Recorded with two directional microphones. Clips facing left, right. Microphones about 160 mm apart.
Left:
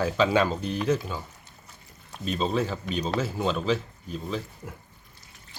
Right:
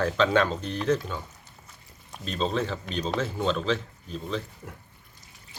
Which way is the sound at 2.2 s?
5° left (ahead or behind).